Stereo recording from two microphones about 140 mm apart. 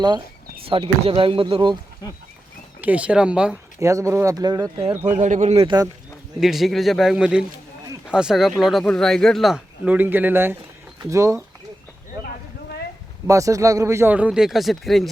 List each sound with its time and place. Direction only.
0.6 s speech: 40° right (ahead or behind)
2.8 s speech: 10° right (ahead or behind)
3.8 s speech: 20° right (ahead or behind)
5.0 s speech: 60° right (ahead or behind)
5.6 s speech: 30° right (ahead or behind)
6.4 s speech: centre (ahead or behind); by 11.3 s 20° right (ahead or behind)
13.2 s speech: 25° right (ahead or behind); by 15.1 s centre (ahead or behind)